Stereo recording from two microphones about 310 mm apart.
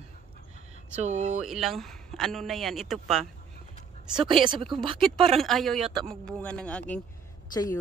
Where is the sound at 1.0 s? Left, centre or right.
Right.